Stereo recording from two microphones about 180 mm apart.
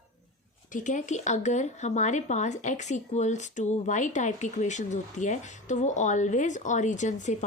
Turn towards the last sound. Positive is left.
turn(degrees=40)  # may be behind; listen again after turning